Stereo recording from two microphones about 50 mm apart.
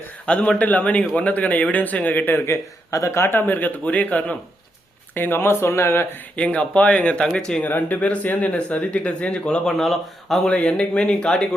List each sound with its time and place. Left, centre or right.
0.3 s speech: left
3.0 s speech: left
3.2 s speech: left
5.1 s speech: left
6.3 s speech: left
7.6 s speech: left
9.7 s speech: centre
10.5 s speech: left